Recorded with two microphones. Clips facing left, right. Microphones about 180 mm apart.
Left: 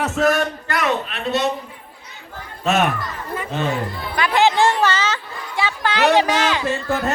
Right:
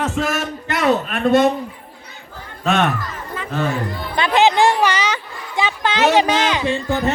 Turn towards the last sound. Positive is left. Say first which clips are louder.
# right 2 dB
turn(degrees=0)  # may be behind; listen again after turning